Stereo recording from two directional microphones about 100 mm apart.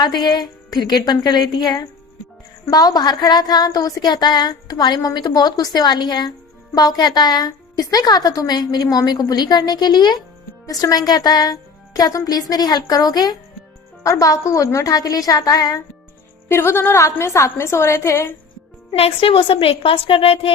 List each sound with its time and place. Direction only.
0.0 s a woman's voice: 45° left (ahead or behind)
16.5 s a woman's voice: 25° left (ahead or behind)
18.9 s a woman's voice: 80° left